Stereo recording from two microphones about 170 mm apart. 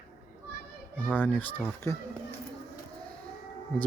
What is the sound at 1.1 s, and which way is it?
Speech, 10° left (ahead or behind).